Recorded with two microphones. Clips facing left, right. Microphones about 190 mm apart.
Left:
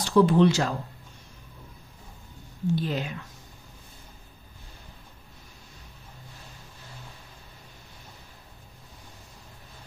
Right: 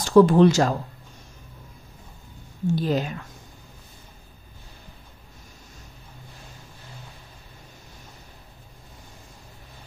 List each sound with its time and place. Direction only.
0.0 s speech: 45° right (ahead or behind)
2.6 s speech: 40° right (ahead or behind)